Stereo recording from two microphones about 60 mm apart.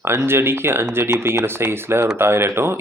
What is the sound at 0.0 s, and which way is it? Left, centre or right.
Speech, right.